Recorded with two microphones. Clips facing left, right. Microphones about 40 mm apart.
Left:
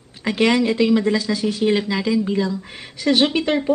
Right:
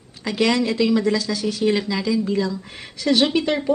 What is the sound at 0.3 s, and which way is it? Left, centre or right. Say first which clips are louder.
Speech: left 2 dB; left.